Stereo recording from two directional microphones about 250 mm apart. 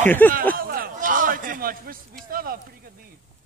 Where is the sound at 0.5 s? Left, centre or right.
Right.